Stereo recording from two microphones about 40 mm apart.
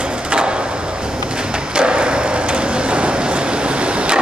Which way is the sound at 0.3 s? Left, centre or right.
Right.